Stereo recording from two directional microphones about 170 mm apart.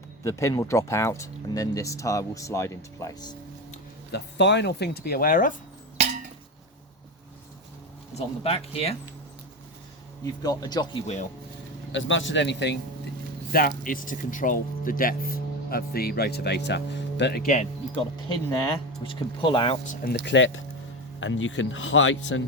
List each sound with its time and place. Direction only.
0.3 s speech: 15° left (ahead or behind)
4.1 s speech: 90° left; by 5.5 s 55° left (ahead or behind)
8.1 s speech: 35° left (ahead or behind)
10.4 s speech: 20° left (ahead or behind)
11.0 s speech: 40° left (ahead or behind)
11.9 s speech: 90° left
13.5 s speech: 55° left (ahead or behind); by 17.4 s 90° left
17.4 s speech: 45° left (ahead or behind)
19.0 s speech: 30° left (ahead or behind)
19.9 s speech: 75° left (ahead or behind)